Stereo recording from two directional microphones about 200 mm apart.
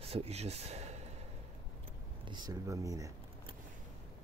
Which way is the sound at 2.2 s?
20° right (ahead or behind).